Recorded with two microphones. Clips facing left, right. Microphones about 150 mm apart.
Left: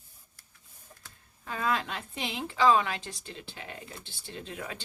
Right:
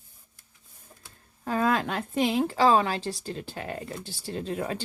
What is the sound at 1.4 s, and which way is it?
Speech, 45° right (ahead or behind).